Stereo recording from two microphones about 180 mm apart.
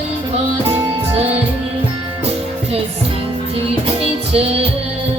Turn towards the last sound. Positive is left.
turn(degrees=-35)  # may be behind; listen again after turning